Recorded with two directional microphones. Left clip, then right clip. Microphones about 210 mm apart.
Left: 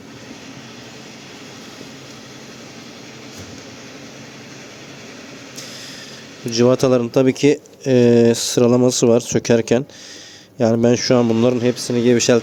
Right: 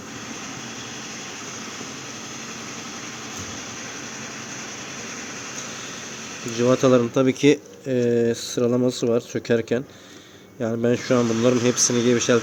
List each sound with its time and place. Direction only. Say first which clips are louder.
6.6 s speech: left 3 dB; 35° left (ahead or behind)
7.9 s speech: left 8 dB; 35° left (ahead or behind)
11.6 s speech: left 2 dB; 15° left (ahead or behind)
12.1 s speech: left 7 dB; 30° left (ahead or behind)